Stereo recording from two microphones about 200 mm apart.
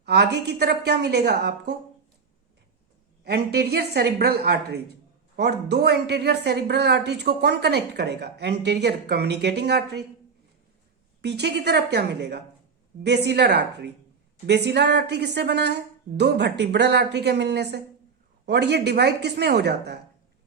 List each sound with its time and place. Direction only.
0.0 s speech: 55° right (ahead or behind)
3.2 s a woman's voice: 55° right (ahead or behind)
11.2 s speech: 55° right (ahead or behind)